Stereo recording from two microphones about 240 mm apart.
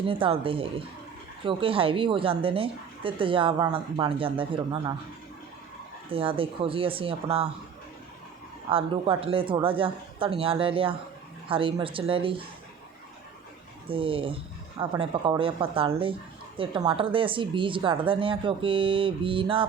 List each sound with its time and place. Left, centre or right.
0.0 s a woman's voice: right
6.1 s a woman's voice: right
8.7 s a woman's voice: right
13.8 s a woman's voice: right